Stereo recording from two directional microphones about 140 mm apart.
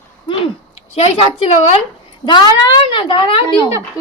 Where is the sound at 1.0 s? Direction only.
45° left (ahead or behind).